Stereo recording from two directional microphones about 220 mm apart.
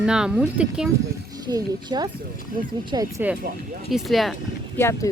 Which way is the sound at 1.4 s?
20° right (ahead or behind).